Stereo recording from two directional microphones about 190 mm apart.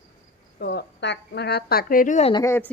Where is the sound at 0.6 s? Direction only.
60° left (ahead or behind); by 2.3 s 40° left (ahead or behind).